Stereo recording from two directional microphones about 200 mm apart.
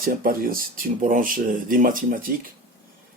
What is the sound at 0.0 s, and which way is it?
Speech, 45° right (ahead or behind).